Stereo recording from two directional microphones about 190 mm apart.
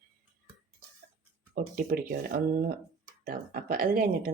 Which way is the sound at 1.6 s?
50° right (ahead or behind).